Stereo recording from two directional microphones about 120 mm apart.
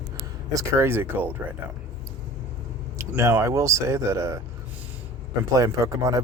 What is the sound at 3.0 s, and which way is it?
Speech, 20° right (ahead or behind).